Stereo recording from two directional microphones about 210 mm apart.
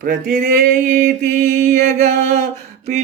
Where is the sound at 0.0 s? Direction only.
40° right (ahead or behind).